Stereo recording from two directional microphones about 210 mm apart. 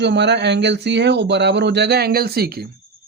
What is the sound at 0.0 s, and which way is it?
Speech, 55° right (ahead or behind).